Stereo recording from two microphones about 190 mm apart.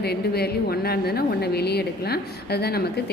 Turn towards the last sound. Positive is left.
turn(degrees=55)  # may be behind; listen again after turning